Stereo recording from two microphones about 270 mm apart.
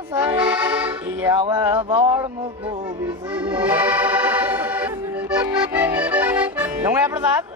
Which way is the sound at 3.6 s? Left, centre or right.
Centre.